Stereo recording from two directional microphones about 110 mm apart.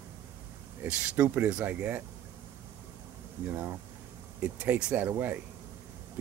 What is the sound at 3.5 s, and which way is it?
Speech, 20° right (ahead or behind).